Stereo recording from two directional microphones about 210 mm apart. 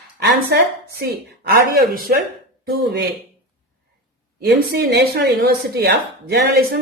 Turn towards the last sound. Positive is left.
turn(degrees=-50)  # may be behind; listen again after turning